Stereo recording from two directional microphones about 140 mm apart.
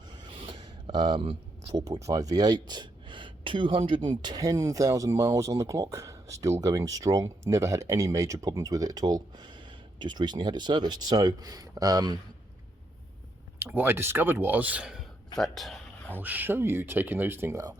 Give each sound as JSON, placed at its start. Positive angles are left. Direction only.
{"t": 0.3, "sound": "a sound", "side_deg": -35}
{"t": 1.8, "sound": "speech", "side_deg": -25}
{"t": 13.6, "sound": "speech", "side_deg": -15}
{"t": 16.1, "sound": "speech", "side_deg": -15}